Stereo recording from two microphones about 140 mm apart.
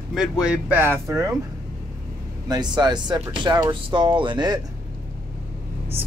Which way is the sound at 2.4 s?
30° right (ahead or behind).